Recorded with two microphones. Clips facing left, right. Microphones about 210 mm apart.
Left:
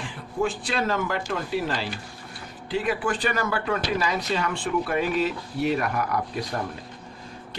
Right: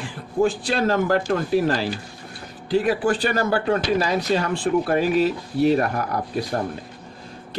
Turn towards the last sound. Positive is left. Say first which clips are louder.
# right 3 dB
turn(degrees=-35)  # may be behind; listen again after turning